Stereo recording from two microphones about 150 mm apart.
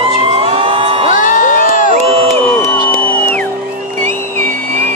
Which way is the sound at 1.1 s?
60° left (ahead or behind).